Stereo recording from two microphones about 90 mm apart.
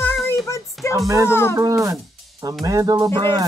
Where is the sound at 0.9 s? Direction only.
35° right (ahead or behind).